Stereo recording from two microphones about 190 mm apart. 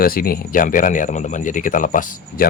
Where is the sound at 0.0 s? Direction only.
50° left (ahead or behind).